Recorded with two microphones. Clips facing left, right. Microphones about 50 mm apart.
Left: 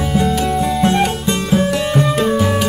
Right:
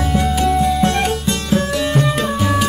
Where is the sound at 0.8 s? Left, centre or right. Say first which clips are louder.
Left 2 dB; centre.